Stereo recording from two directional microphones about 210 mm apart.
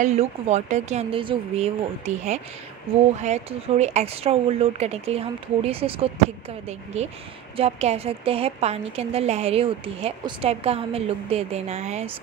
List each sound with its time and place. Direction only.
0.0 s a woman's voice: 30° right (ahead or behind)
7.5 s a woman's voice: 30° right (ahead or behind)